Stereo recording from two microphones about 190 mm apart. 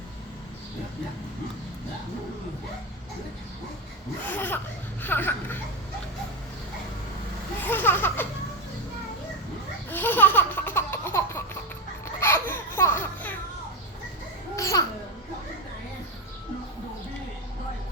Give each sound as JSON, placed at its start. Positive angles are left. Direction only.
{"t": 4.3, "sound": "speech", "side_deg": 10}
{"t": 7.6, "sound": "speech", "side_deg": 10}
{"t": 9.9, "sound": "laughter", "side_deg": 10}
{"t": 12.0, "sound": "music", "side_deg": 10}
{"t": 14.5, "sound": "babbling", "side_deg": 15}